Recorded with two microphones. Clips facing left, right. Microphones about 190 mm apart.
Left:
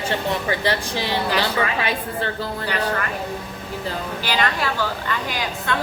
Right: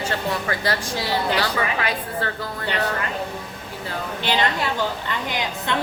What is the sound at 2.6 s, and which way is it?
Speech, 20° right (ahead or behind).